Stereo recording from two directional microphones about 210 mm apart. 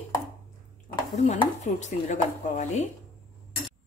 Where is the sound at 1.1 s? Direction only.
35° left (ahead or behind).